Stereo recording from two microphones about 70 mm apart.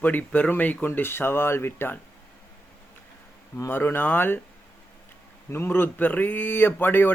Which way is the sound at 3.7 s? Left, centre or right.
Left.